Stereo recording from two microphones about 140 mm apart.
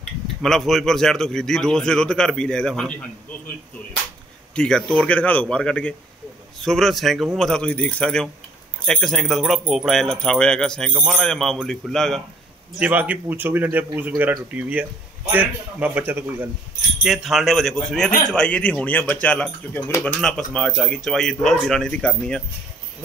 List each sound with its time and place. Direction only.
0.0 s speech: centre (ahead or behind)
4.6 s speech: 5° left (ahead or behind)
12.7 s speech: 10° right (ahead or behind)
17.0 s speech: centre (ahead or behind)